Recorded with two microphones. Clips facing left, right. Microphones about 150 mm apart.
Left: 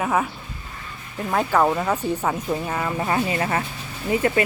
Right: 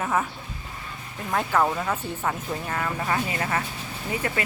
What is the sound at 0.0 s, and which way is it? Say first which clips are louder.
Speech: left 3 dB; 15° left (ahead or behind).